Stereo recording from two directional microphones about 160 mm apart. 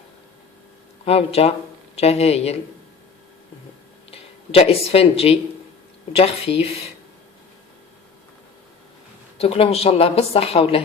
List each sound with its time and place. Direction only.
1.0 s a woman's voice: 40° left (ahead or behind)
4.1 s a woman's voice: 40° left (ahead or behind)
9.4 s a woman's voice: 40° left (ahead or behind)